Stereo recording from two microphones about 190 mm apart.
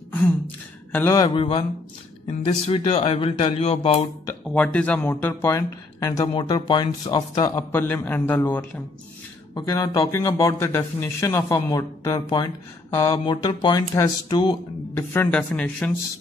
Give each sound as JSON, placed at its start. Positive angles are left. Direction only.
{"t": 0.9, "sound": "speech", "side_deg": 15}
{"t": 4.5, "sound": "speech", "side_deg": 5}